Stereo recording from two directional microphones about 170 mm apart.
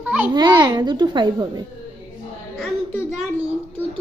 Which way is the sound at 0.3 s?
25° right (ahead or behind).